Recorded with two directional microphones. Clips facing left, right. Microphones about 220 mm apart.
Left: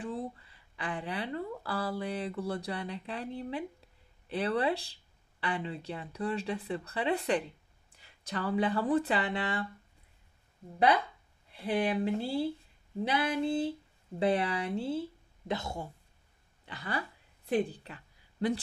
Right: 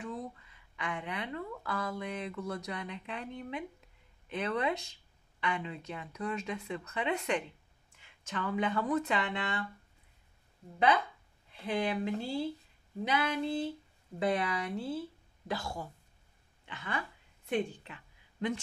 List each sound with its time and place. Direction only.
0.0 s speech: 30° left (ahead or behind)
11.6 s speech: 35° left (ahead or behind)
16.6 s a woman's voice: 35° left (ahead or behind)